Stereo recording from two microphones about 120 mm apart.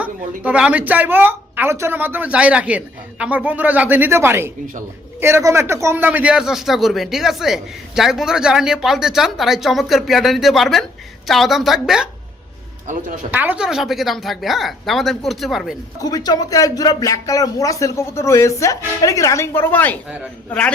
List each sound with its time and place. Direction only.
0.0 s a woman's voice: 10° right (ahead or behind)
13.3 s a man's voice: 15° right (ahead or behind)
16.0 s a man's voice: 35° left (ahead or behind); by 20.7 s 10° left (ahead or behind)